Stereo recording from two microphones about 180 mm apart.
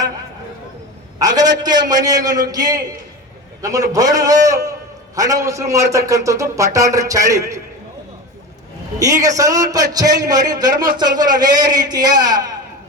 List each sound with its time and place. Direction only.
1.2 s a man's voice: 20° right (ahead or behind)
9.0 s a man's voice: 20° right (ahead or behind)